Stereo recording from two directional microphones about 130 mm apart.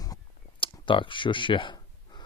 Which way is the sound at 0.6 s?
40° left (ahead or behind).